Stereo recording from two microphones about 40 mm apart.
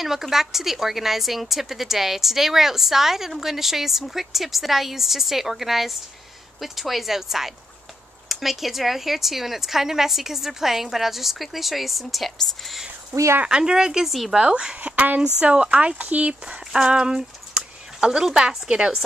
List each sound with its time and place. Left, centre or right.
0.0 s a woman's voice: centre
13.5 s speech: right
14.0 s speech: centre
14.4 s speech: right
14.8 s a sound: right
15.4 s speech: right
16.7 s speech: right